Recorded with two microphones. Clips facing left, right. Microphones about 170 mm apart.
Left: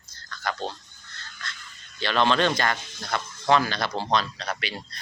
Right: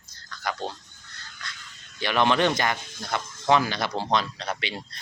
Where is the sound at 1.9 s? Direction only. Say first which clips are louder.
Even; 15° right (ahead or behind).